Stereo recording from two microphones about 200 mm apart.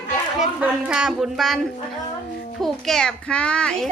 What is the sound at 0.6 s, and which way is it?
A child's voice, 5° right (ahead or behind).